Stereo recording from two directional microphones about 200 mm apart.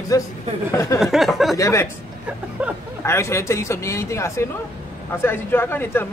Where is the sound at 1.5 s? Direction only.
15° left (ahead or behind).